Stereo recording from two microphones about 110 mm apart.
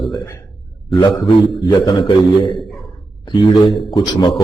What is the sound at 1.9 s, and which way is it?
Speech, 45° left (ahead or behind).